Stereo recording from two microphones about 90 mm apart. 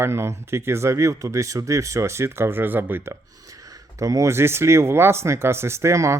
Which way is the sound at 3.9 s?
35° right (ahead or behind).